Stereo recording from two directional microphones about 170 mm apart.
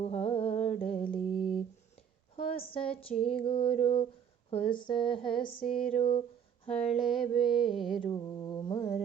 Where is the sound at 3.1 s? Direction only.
45° left (ahead or behind).